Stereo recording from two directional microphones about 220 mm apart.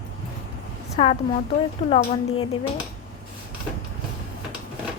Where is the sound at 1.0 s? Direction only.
25° left (ahead or behind).